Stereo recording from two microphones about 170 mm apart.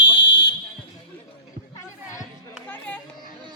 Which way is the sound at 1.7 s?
20° left (ahead or behind).